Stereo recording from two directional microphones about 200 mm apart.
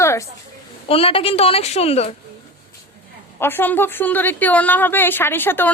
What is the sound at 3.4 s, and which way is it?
Speech, 10° left (ahead or behind).